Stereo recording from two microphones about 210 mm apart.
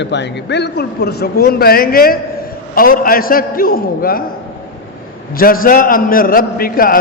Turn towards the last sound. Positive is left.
turn(degrees=45)  # may be behind; listen again after turning